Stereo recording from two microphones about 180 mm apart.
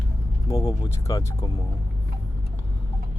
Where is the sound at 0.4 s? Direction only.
20° left (ahead or behind).